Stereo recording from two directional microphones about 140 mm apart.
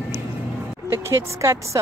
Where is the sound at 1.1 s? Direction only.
20° right (ahead or behind).